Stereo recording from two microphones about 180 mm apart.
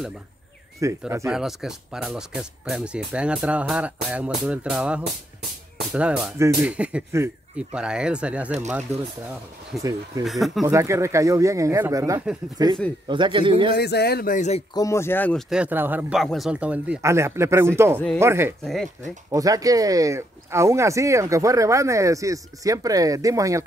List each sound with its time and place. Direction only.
0.7 s speech: 15° right (ahead or behind)
1.3 s speech: centre (ahead or behind)
9.7 s speech: centre (ahead or behind)
10.6 s a man's voice: 15° right (ahead or behind)
13.7 s speech: 65° left (ahead or behind); by 14.6 s 45° left (ahead or behind)
14.7 s speech: 20° left (ahead or behind)
15.5 s speech: 10° right (ahead or behind)
18.6 s speech: centre (ahead or behind)
19.3 s speech: 20° right (ahead or behind)